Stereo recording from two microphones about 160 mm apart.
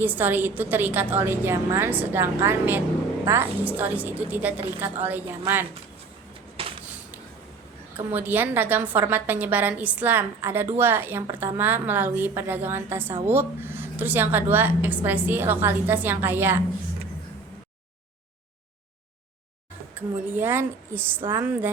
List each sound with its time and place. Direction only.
0.0 s a woman's voice: 10° right (ahead or behind)
6.6 s a sound: 35° right (ahead or behind)
7.9 s a woman's voice: 10° right (ahead or behind)
20.2 s a woman's voice: 10° right (ahead or behind)